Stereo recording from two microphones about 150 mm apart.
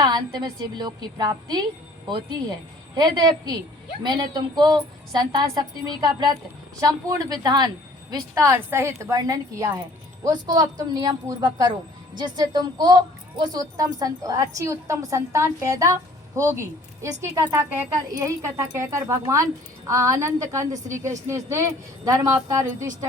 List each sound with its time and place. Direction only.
0.3 s a woman's voice: 25° right (ahead or behind)
8.4 s a woman's voice: 15° right (ahead or behind)